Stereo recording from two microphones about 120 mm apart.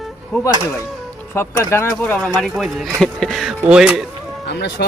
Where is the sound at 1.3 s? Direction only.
20° left (ahead or behind).